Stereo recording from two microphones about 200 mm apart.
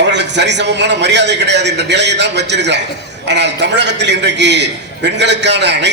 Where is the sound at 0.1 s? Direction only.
60° right (ahead or behind).